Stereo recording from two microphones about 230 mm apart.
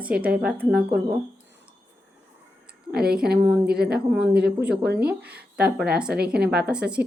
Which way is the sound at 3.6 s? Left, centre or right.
Right.